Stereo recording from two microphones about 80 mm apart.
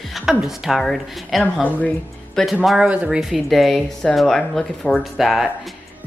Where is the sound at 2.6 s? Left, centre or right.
Centre.